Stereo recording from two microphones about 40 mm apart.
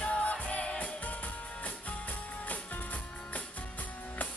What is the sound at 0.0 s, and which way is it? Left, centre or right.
Music, left.